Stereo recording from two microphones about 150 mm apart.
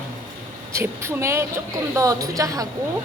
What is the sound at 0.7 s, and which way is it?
A woman's voice, 20° right (ahead or behind).